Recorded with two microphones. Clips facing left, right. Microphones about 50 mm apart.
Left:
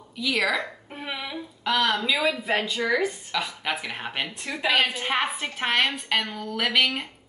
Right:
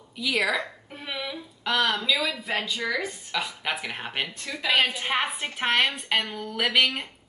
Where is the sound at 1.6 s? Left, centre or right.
Centre.